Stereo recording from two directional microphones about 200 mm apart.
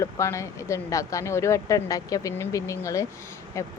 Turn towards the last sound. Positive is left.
turn(degrees=15)  # may be behind; listen again after turning